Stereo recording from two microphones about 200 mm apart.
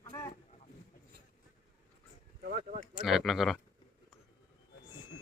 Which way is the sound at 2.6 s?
35° right (ahead or behind).